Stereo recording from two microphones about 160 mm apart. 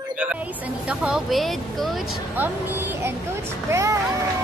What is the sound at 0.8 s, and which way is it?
Speech, 5° right (ahead or behind).